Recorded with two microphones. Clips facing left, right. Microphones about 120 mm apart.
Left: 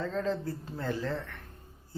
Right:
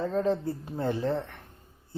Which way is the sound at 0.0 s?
20° right (ahead or behind).